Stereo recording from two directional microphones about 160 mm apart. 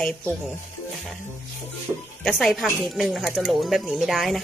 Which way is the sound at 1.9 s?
25° right (ahead or behind).